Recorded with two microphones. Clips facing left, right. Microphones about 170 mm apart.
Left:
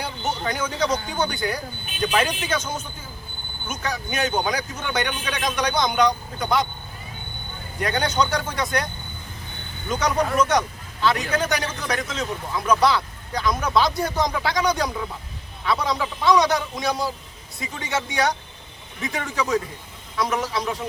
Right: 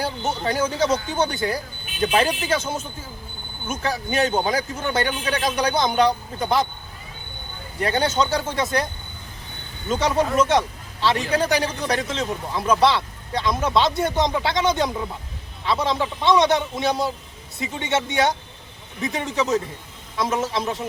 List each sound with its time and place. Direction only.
0.4 s speech: 30° right (ahead or behind)
7.8 s speech: 30° right (ahead or behind)
9.9 s speech: 25° right (ahead or behind)